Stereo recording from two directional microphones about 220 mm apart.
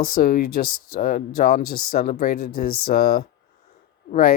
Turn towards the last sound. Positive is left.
turn(degrees=40)  # may be behind; listen again after turning